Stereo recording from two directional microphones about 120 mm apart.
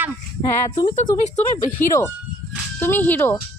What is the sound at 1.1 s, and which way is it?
Speech, 25° left (ahead or behind).